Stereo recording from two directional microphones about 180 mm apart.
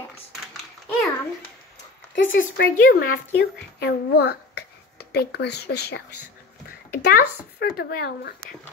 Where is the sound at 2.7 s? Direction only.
55° left (ahead or behind).